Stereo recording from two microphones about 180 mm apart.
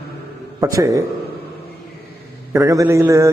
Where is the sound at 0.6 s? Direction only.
20° right (ahead or behind).